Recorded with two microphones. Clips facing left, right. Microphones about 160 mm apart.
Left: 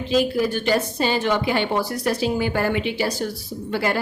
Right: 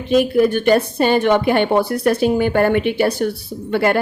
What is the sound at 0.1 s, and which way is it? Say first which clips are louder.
A woman's voice: right 6 dB; 55° right (ahead or behind).